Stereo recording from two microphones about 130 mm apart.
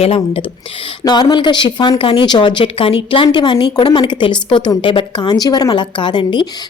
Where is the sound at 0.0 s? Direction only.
50° left (ahead or behind).